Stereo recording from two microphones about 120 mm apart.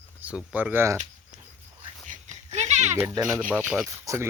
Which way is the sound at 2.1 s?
75° right (ahead or behind).